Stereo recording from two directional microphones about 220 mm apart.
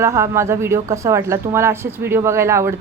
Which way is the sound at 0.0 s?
10° right (ahead or behind).